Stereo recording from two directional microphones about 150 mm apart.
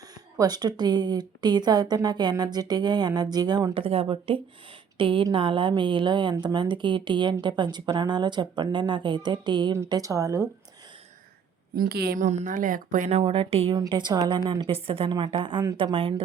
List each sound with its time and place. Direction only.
0.1 s speech: 25° right (ahead or behind)
4.3 s a woman's voice: 35° right (ahead or behind); by 10.5 s 20° right (ahead or behind)
11.7 s a woman's voice: 90° right
12.2 s speech: 55° right (ahead or behind); by 13.7 s 40° right (ahead or behind)
13.7 s speech: 30° right (ahead or behind)
14.7 s a woman's voice: 40° right (ahead or behind)